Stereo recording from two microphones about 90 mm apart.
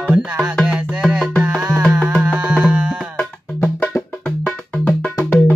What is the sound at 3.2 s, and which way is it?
Music, 10° left (ahead or behind).